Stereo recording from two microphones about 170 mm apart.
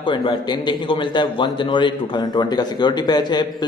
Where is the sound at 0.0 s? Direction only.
30° left (ahead or behind).